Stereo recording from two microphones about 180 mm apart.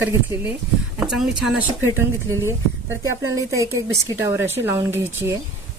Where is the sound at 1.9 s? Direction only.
15° right (ahead or behind).